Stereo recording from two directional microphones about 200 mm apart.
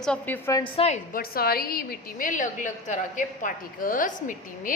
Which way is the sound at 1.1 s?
50° left (ahead or behind).